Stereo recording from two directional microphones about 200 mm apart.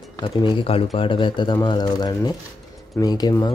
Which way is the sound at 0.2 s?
25° left (ahead or behind).